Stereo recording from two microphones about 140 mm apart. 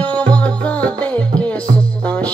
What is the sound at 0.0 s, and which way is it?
Music, 10° left (ahead or behind).